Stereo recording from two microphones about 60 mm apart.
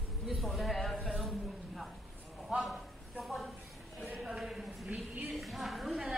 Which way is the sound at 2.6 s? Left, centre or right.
Centre.